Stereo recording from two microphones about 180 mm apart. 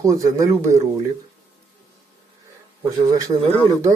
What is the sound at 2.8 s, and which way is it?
Speech, 15° right (ahead or behind).